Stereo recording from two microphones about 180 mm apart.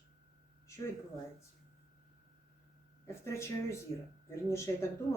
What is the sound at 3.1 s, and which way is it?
A man's voice, 15° left (ahead or behind).